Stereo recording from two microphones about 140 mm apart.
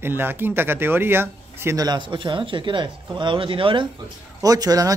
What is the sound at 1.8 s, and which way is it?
Speech, 30° right (ahead or behind).